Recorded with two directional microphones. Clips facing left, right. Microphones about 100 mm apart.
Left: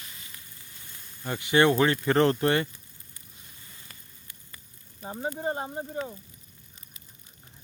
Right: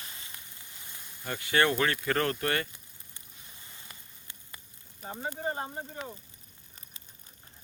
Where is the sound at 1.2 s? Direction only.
15° left (ahead or behind).